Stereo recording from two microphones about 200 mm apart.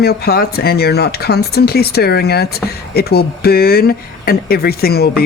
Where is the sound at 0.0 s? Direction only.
50° left (ahead or behind).